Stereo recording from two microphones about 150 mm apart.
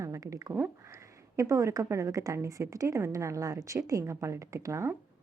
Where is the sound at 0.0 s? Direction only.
20° right (ahead or behind).